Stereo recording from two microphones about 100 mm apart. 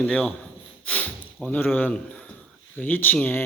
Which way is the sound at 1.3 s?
10° left (ahead or behind).